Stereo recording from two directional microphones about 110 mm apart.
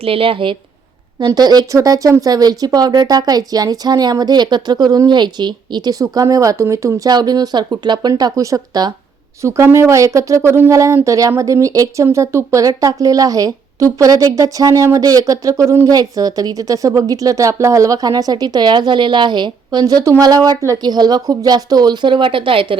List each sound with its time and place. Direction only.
0.0 s speech: 55° right (ahead or behind)
1.2 s a woman's voice: 40° right (ahead or behind)
9.4 s a woman's voice: 25° right (ahead or behind); by 19.8 s 45° right (ahead or behind)
19.8 s a woman's voice: 30° right (ahead or behind); by 22.8 s 55° right (ahead or behind)